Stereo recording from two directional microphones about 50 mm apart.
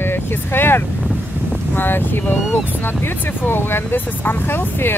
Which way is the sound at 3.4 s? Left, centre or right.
Left.